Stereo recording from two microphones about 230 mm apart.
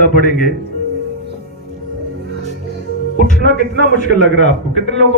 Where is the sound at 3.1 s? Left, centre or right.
Left.